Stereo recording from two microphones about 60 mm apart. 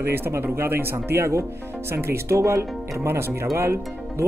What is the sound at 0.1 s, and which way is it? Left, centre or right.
Speech, right.